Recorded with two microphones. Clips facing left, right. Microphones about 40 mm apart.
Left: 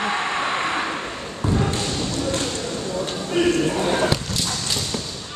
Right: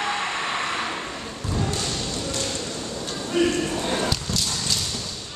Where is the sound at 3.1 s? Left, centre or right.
Centre.